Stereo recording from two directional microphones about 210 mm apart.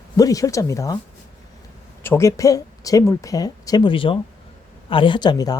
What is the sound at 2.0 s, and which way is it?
Speech, 10° left (ahead or behind).